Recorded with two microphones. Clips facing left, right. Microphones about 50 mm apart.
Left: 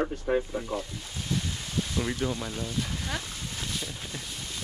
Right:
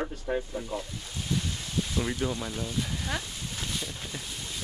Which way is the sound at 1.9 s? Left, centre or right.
Centre.